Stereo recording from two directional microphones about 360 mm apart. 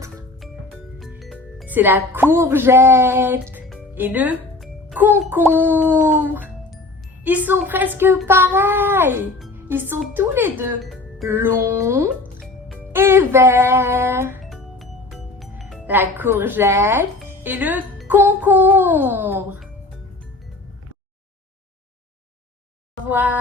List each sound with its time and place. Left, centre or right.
0.0 s music: centre
0.9 s speech: centre
23.0 s a sound: centre